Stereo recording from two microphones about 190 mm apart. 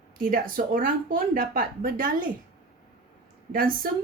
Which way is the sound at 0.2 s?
50° right (ahead or behind).